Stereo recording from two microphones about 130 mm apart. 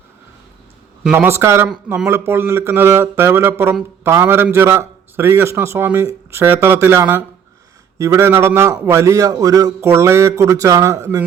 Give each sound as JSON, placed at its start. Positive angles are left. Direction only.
{"t": 1.1, "sound": "a man's voice", "side_deg": -20}